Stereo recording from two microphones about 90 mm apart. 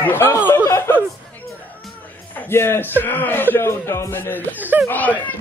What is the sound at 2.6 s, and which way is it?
A man's voice, 25° left (ahead or behind).